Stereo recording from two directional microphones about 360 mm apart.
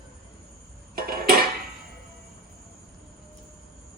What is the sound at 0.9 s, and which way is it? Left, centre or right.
Dishes, right.